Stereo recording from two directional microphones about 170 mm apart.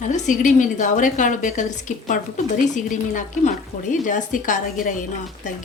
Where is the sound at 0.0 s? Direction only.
45° left (ahead or behind).